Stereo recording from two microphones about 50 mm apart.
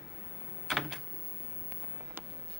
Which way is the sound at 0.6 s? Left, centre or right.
Centre.